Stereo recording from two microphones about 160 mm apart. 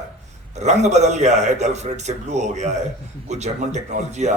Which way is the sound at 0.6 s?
45° right (ahead or behind).